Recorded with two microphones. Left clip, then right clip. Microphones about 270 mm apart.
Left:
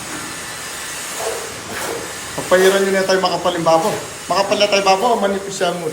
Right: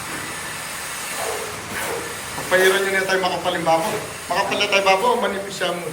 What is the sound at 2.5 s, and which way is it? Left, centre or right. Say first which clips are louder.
A man's voice: left 4 dB; centre.